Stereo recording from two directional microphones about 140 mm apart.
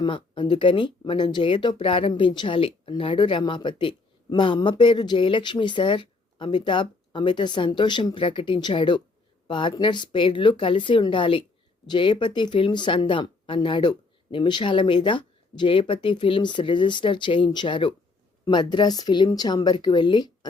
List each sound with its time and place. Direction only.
0.0 s speech: 35° left (ahead or behind)